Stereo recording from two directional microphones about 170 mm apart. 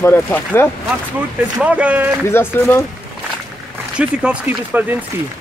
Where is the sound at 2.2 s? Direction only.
15° left (ahead or behind).